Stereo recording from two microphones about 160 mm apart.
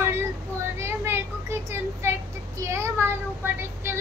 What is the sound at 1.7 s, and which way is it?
A child's voice, 15° right (ahead or behind).